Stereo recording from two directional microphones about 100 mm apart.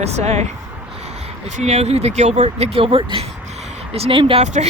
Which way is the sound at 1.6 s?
90° right.